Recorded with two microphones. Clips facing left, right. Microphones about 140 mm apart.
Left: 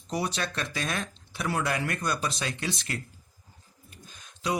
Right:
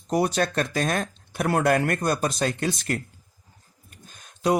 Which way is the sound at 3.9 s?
50° right (ahead or behind).